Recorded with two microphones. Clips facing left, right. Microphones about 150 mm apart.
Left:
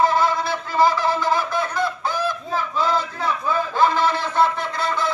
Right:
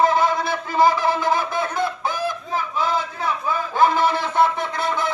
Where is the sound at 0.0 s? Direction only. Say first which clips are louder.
Right 1 dB; 20° right (ahead or behind).